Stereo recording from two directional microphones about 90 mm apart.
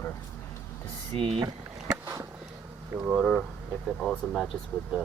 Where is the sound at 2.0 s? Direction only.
35° right (ahead or behind).